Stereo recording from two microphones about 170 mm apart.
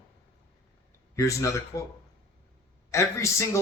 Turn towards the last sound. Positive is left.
turn(degrees=15)  # may be behind; listen again after turning